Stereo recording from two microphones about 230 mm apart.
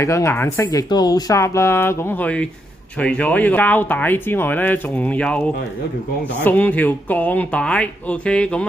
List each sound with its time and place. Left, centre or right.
0.0 s speech: centre
6.4 s speech: centre